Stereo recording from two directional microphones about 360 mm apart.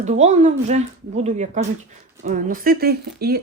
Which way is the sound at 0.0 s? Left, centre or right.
Centre.